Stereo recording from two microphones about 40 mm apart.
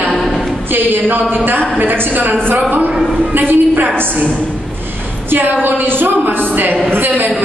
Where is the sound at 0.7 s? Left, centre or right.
Right.